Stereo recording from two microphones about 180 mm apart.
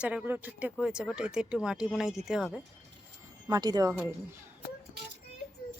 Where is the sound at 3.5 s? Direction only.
20° right (ahead or behind).